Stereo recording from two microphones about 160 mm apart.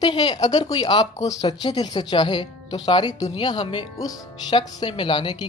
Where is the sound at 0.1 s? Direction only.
30° left (ahead or behind).